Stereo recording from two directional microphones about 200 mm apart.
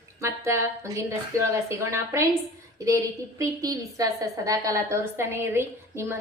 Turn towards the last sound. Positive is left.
turn(degrees=-10)  # may be behind; listen again after turning